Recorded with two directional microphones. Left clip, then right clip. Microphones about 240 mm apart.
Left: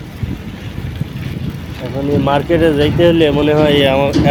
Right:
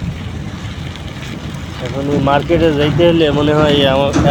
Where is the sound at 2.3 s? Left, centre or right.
Centre.